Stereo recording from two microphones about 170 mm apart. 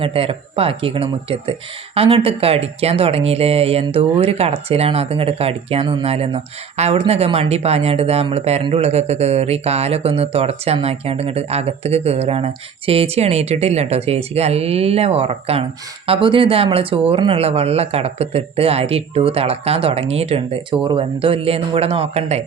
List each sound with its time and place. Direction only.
0.0 s speech: 35° right (ahead or behind)